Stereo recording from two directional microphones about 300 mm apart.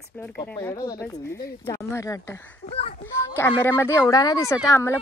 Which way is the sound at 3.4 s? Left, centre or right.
Centre.